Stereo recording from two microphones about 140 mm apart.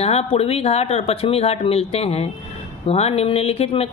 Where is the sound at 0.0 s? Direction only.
45° left (ahead or behind).